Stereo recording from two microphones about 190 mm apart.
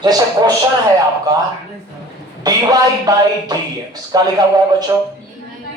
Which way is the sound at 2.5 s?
20° right (ahead or behind).